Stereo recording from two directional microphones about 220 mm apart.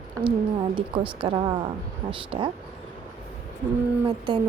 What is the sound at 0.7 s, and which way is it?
A woman's voice, 25° right (ahead or behind).